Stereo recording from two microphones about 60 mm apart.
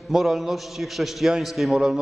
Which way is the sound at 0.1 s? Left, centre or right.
Centre.